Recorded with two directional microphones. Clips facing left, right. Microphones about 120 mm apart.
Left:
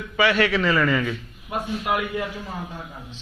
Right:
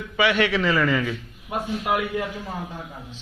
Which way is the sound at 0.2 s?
15° right (ahead or behind).